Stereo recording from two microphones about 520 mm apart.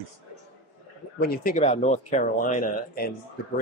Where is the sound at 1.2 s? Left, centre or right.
Centre.